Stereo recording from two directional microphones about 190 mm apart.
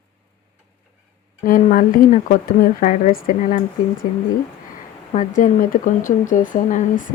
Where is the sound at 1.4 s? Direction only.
45° left (ahead or behind).